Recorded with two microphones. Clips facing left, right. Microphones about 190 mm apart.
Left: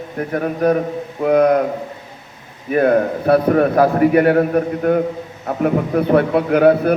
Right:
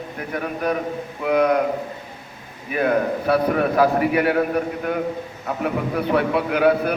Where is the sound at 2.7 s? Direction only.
45° left (ahead or behind).